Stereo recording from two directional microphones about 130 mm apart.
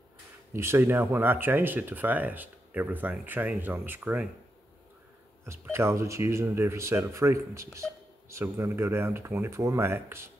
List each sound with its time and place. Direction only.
0.5 s speech: 20° right (ahead or behind)
5.4 s speech: 20° right (ahead or behind)